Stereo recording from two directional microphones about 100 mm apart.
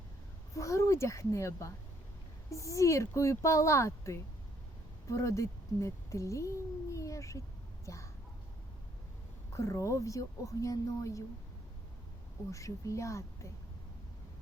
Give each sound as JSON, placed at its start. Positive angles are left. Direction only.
{"t": 0.5, "sound": "a child's voice", "side_deg": 30}
{"t": 9.6, "sound": "speech", "side_deg": 30}
{"t": 12.5, "sound": "speech", "side_deg": 35}